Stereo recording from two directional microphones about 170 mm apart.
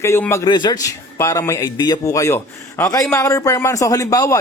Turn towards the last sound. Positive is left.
turn(degrees=20)  # may be behind; listen again after turning